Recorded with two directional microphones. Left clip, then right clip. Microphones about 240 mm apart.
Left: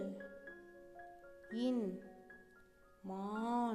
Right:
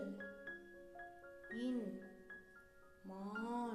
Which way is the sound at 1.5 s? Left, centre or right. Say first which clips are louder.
Left 6 dB; left.